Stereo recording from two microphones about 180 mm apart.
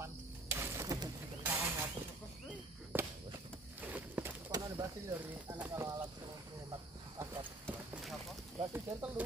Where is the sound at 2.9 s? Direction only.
10° right (ahead or behind).